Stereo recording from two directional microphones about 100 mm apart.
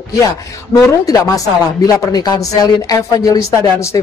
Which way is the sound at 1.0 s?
35° left (ahead or behind).